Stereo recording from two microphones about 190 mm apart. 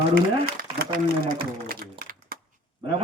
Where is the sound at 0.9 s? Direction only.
50° right (ahead or behind).